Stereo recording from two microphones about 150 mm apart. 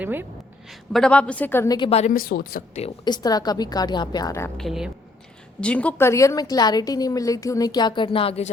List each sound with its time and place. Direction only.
0.0 s a woman's voice: 15° right (ahead or behind)
0.7 s a woman's voice: 5° left (ahead or behind)
1.9 s speech: 45° left (ahead or behind)
2.1 s speech: 75° left (ahead or behind)
3.0 s a woman's voice: 25° left (ahead or behind)
4.5 s a woman's voice: centre (ahead or behind); by 8.4 s 40° left (ahead or behind)